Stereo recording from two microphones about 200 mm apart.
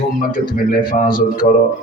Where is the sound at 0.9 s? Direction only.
45° left (ahead or behind).